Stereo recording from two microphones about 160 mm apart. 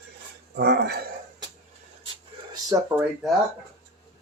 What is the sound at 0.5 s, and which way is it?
Dog, 90° right.